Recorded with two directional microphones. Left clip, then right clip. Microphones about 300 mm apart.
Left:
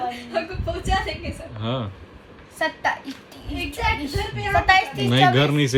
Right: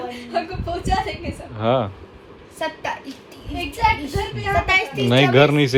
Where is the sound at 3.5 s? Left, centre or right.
Centre.